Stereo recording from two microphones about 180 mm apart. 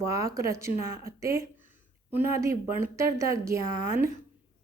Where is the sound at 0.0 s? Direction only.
15° right (ahead or behind).